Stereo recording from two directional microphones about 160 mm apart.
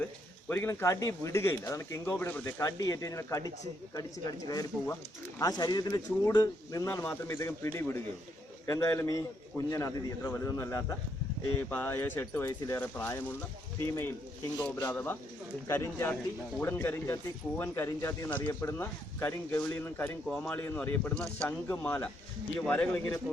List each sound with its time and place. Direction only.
0.0 s a man's voice: 15° left (ahead or behind)